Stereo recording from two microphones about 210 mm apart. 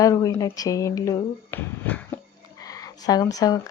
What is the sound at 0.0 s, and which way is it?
Speech, 15° left (ahead or behind).